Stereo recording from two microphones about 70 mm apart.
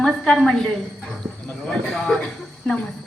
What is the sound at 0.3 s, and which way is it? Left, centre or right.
A woman's voice, centre.